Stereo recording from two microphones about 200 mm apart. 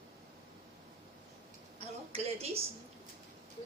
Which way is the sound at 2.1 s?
30° right (ahead or behind).